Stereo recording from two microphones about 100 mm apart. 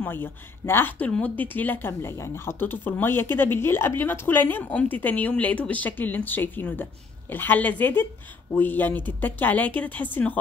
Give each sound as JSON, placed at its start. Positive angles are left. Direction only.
{"t": 0.0, "sound": "speech", "side_deg": 20}